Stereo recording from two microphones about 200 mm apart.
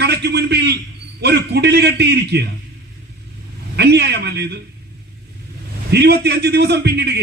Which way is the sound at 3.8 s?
55° right (ahead or behind).